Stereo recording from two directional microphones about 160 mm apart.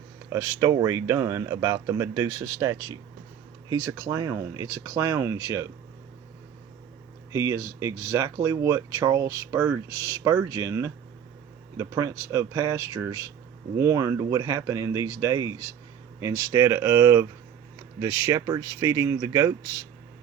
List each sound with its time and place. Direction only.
0.3 s speech: 15° right (ahead or behind)
7.3 s speech: 20° right (ahead or behind)